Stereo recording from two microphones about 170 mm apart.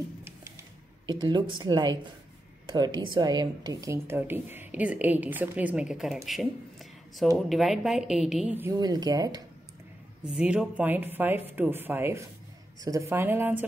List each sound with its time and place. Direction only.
1.0 s speech: 25° right (ahead or behind); by 6.1 s 5° right (ahead or behind)
6.2 s a sound: centre (ahead or behind)
7.3 s a woman's voice: centre (ahead or behind)
8.7 s speech: 25° right (ahead or behind)
10.2 s speech: 5° right (ahead or behind)